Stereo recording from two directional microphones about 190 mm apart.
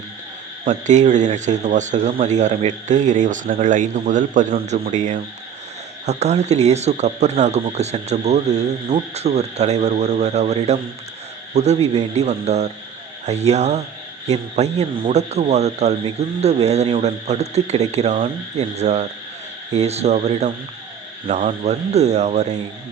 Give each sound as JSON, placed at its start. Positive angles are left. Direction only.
{"t": 0.6, "sound": "a man's voice", "side_deg": -40}